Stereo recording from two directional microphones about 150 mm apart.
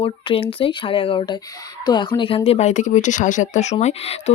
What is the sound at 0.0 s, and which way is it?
Speech, 35° left (ahead or behind).